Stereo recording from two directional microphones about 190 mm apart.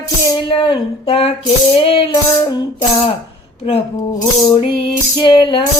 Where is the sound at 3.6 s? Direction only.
30° left (ahead or behind).